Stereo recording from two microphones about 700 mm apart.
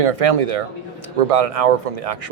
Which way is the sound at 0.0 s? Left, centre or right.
Right.